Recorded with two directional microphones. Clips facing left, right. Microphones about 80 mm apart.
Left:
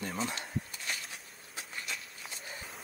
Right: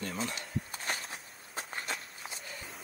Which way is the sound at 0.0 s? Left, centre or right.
Centre.